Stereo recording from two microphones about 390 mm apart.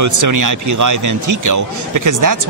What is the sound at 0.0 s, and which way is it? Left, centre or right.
A man's voice, right.